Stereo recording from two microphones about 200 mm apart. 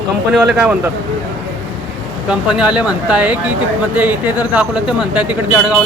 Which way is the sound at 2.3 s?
5° right (ahead or behind).